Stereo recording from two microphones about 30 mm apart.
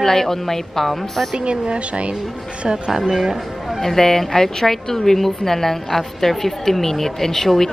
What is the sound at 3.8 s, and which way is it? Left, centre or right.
Speech, centre.